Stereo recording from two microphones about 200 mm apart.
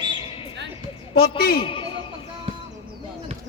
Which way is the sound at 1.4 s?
50° left (ahead or behind).